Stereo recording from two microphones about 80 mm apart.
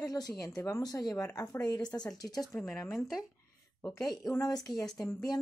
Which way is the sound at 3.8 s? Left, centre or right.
Left.